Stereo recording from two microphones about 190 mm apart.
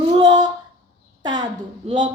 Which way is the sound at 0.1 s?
20° right (ahead or behind).